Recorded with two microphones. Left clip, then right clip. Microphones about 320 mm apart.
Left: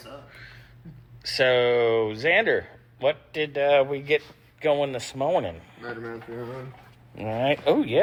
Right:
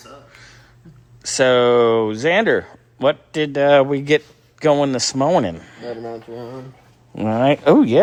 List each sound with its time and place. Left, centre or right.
1.5 s speech: right
5.5 s speech: right
7.2 s speech: right